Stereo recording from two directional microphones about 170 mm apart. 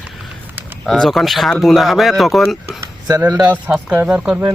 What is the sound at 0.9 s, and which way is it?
Speech, centre (ahead or behind).